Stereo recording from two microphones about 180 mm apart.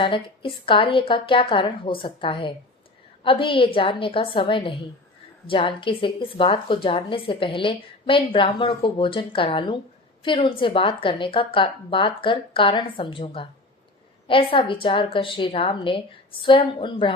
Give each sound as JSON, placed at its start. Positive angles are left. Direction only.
{"t": 0.0, "sound": "speech", "side_deg": 30}